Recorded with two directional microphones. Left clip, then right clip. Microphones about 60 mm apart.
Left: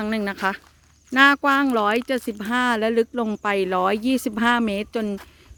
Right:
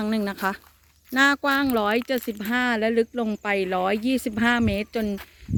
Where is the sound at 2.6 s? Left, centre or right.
Left.